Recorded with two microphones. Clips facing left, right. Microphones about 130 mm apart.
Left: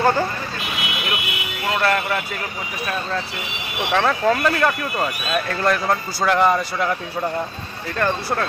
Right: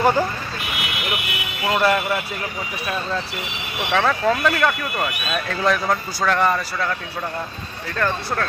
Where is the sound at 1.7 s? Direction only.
10° right (ahead or behind).